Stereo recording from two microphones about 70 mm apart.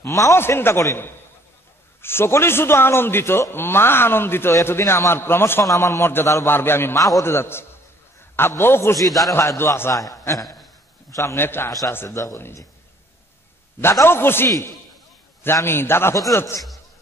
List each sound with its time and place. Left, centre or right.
0.0 s a man's voice: left
0.4 s a man's voice: left
2.0 s a man's voice: left
9.0 s a man's voice: centre
9.3 s a man's voice: left
11.3 s a man's voice: left
14.0 s a man's voice: left